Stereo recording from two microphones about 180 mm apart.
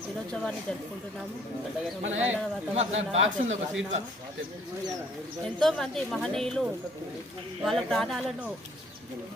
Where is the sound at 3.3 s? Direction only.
40° right (ahead or behind).